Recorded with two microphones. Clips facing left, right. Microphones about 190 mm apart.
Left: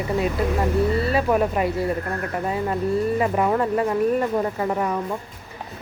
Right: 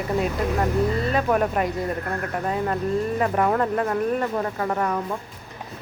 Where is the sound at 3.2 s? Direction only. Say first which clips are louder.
Left 1 dB; 5° left (ahead or behind).